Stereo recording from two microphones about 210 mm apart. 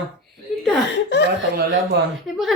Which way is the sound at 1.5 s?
55° right (ahead or behind).